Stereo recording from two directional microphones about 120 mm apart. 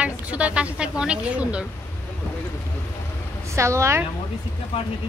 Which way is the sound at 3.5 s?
25° right (ahead or behind).